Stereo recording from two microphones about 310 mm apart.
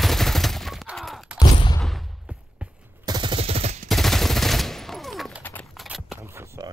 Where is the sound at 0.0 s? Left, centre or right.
Centre.